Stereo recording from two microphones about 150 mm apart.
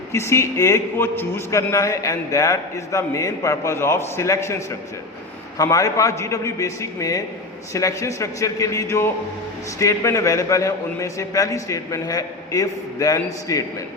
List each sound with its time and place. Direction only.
0.1 s a man's voice: 20° left (ahead or behind)